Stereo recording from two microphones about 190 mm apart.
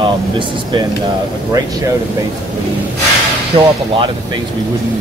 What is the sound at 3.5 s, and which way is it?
Speech, 30° right (ahead or behind).